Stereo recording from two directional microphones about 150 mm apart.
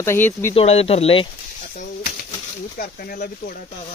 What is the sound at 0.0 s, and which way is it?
Speech, 15° left (ahead or behind).